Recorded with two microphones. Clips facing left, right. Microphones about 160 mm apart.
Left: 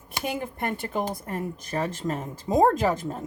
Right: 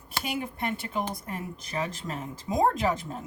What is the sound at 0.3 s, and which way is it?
Speech, 50° left (ahead or behind).